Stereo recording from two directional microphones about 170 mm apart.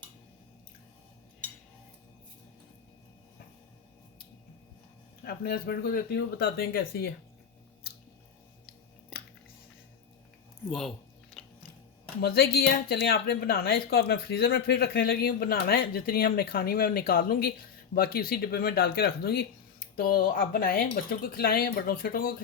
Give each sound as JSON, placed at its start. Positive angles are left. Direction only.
{"t": 5.2, "sound": "speech", "side_deg": 65}
{"t": 10.7, "sound": "speech", "side_deg": 0}
{"t": 11.4, "sound": "music", "side_deg": 0}
{"t": 12.2, "sound": "speech", "side_deg": 65}